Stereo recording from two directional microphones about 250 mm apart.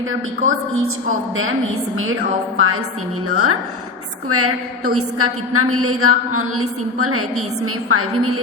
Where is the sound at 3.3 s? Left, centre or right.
Right.